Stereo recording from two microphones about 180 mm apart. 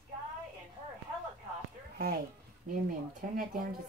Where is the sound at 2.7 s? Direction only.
50° right (ahead or behind).